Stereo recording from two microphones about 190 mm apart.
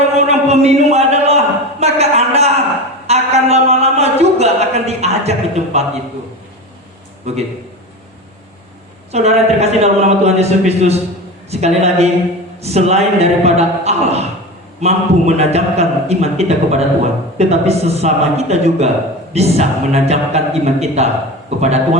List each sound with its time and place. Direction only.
0.0 s a sound: 35° right (ahead or behind)
7.3 s a man's voice: 35° right (ahead or behind)
9.1 s a man's voice: 35° right (ahead or behind)